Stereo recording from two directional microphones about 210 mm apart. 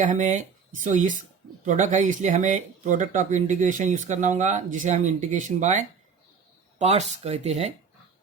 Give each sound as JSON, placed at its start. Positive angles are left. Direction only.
{"t": 0.0, "sound": "speech", "side_deg": -40}